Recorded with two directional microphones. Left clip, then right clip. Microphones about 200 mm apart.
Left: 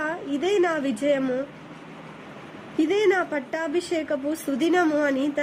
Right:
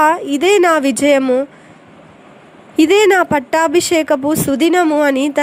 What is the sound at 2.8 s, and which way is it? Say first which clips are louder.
A woman's voice: right 11 dB; 35° right (ahead or behind).